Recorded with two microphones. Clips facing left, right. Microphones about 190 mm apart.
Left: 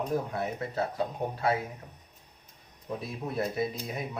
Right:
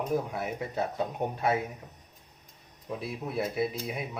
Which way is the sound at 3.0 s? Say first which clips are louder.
Even; 5° right (ahead or behind).